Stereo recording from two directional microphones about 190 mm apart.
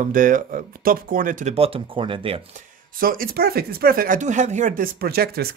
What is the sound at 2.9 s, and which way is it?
Speech, 50° right (ahead or behind).